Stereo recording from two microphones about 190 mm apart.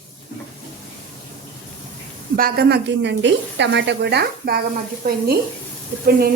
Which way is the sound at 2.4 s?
50° right (ahead or behind).